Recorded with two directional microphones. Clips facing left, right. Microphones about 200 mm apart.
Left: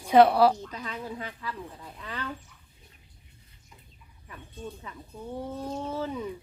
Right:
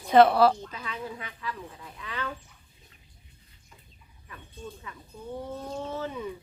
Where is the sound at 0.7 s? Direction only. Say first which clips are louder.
Left 1 dB; 40° left (ahead or behind).